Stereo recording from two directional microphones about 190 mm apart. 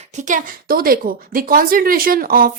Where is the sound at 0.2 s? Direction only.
40° right (ahead or behind).